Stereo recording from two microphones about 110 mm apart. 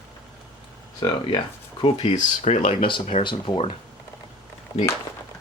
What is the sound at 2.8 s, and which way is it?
Speech, 55° left (ahead or behind).